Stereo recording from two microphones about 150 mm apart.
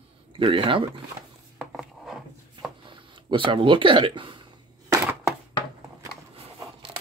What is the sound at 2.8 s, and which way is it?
Speech, 35° right (ahead or behind).